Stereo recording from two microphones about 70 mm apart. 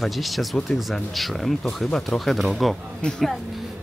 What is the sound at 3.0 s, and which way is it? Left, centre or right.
Speech, centre.